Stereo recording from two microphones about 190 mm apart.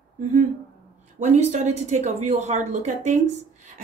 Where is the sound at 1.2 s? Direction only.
35° right (ahead or behind).